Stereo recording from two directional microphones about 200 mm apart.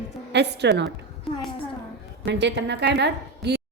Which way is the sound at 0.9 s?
Centre (ahead or behind).